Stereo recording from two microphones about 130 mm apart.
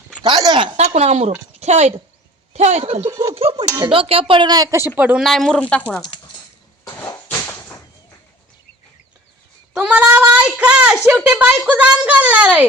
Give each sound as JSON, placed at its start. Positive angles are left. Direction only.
{"t": 0.2, "sound": "a sound", "side_deg": -35}
{"t": 0.8, "sound": "a woman's voice", "side_deg": -55}
{"t": 3.1, "sound": "speech", "side_deg": -25}
{"t": 3.8, "sound": "speech", "side_deg": -45}
{"t": 5.2, "sound": "speech", "side_deg": 0}
{"t": 6.9, "sound": "a sound", "side_deg": 20}
{"t": 9.7, "sound": "a woman's voice", "side_deg": -10}